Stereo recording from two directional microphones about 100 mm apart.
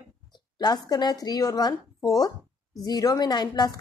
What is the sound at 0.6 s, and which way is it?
A woman's voice, 45° left (ahead or behind).